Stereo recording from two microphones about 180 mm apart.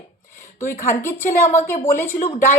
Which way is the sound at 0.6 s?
15° left (ahead or behind).